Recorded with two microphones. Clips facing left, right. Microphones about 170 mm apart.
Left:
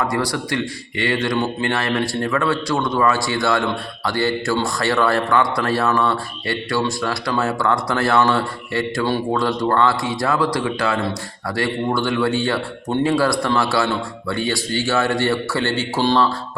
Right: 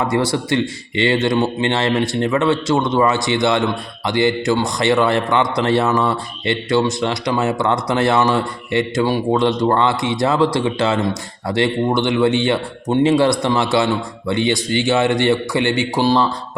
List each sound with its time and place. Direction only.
0.0 s speech: 25° right (ahead or behind)